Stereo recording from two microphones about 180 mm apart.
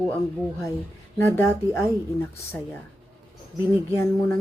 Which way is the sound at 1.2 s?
15° left (ahead or behind).